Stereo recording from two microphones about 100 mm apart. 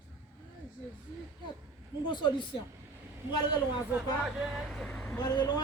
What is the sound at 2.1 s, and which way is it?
Speech, 50° left (ahead or behind).